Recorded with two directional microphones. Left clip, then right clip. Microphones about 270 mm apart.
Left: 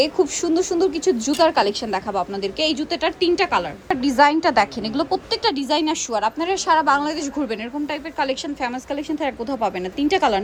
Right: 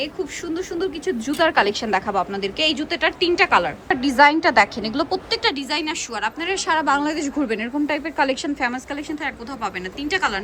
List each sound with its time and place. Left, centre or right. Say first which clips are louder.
0.0 s a woman's voice: left 8 dB; centre
9.2 s a woman's voice: left 6 dB; centre